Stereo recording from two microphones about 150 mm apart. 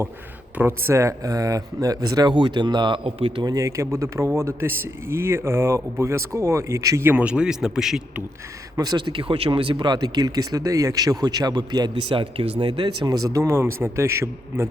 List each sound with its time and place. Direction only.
0.5 s speech: 15° right (ahead or behind); by 3.4 s 40° right (ahead or behind)
3.4 s speech: 20° right (ahead or behind); by 8.2 s 5° right (ahead or behind)
8.7 s speech: 25° right (ahead or behind)